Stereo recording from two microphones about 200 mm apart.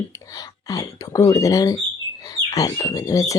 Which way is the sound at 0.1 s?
15° left (ahead or behind).